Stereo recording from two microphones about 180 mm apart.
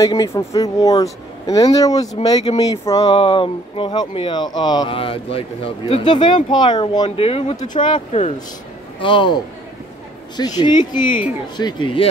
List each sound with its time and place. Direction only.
0.0 s speech: 20° left (ahead or behind)